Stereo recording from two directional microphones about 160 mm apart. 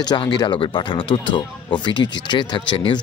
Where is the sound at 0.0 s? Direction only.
30° left (ahead or behind).